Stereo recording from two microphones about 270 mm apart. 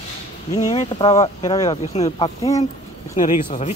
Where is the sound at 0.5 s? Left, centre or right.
Centre.